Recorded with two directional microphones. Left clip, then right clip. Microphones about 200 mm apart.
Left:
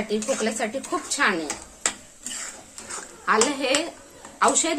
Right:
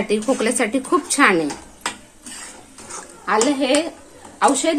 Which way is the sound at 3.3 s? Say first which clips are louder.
Right 4 dB; 15° right (ahead or behind).